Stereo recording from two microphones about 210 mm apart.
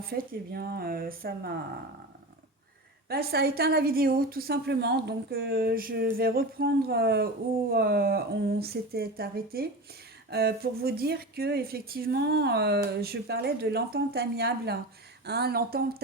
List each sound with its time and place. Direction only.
0.2 s speech: 45° right (ahead or behind)
3.1 s speech: 50° right (ahead or behind)